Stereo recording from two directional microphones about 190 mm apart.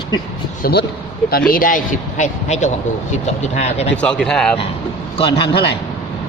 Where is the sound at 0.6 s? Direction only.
55° left (ahead or behind); by 3.8 s 35° left (ahead or behind).